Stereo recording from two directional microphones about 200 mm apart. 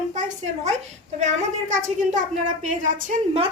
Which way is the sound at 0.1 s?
35° right (ahead or behind).